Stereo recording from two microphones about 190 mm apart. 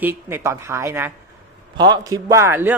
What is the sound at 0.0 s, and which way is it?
Speech, 10° right (ahead or behind).